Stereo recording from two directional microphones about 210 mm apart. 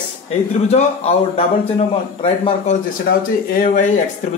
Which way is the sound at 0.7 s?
30° left (ahead or behind).